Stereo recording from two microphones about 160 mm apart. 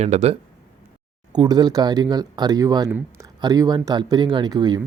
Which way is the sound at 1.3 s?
25° right (ahead or behind).